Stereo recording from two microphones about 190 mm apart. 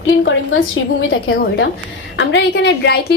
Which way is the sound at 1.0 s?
90° left.